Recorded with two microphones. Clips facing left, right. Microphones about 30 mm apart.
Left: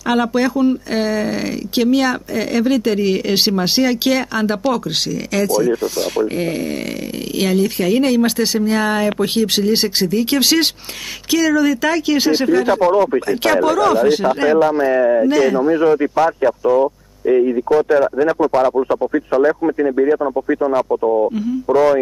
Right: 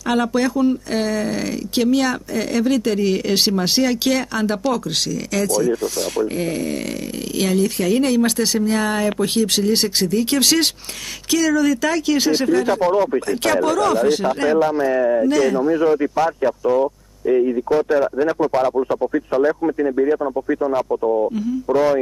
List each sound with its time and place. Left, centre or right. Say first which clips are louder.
0.1 s speech: left 2 dB; centre
18.7 s speech: left 3 dB; left